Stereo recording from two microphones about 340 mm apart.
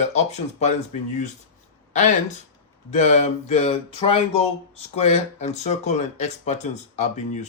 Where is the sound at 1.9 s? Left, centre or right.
Left.